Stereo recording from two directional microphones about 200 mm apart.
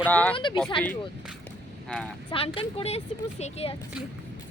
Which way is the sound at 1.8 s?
5° left (ahead or behind).